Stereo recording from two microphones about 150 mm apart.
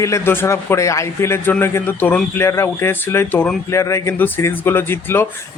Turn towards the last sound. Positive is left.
turn(degrees=15)  # may be behind; listen again after turning